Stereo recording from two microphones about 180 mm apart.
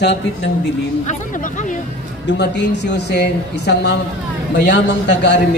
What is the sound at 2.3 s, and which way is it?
A man's voice, 75° left (ahead or behind).